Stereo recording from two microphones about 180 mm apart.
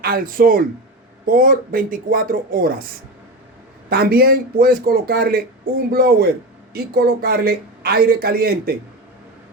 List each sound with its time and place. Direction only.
0.0 s speech: 55° right (ahead or behind)
3.8 s speech: 55° right (ahead or behind)